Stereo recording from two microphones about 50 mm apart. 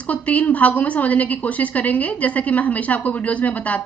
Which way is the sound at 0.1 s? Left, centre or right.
Left.